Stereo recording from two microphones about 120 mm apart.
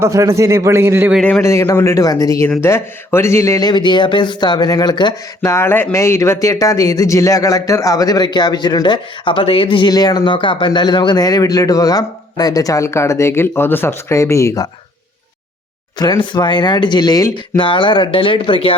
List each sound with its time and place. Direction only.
0.0 s a man's voice: 25° right (ahead or behind)
1.4 s speech: 25° left (ahead or behind)
3.7 s speech: 40° left (ahead or behind)
5.4 s speech: 20° left (ahead or behind)
16.0 s speech: 40° left (ahead or behind)
17.6 s speech: 40° left (ahead or behind)